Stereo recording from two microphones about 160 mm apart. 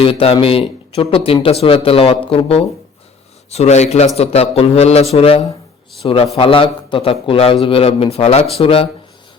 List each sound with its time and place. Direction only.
0.0 s a man's voice: 35° left (ahead or behind)